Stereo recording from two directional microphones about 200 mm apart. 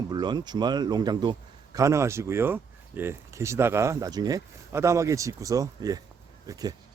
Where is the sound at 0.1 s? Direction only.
20° right (ahead or behind).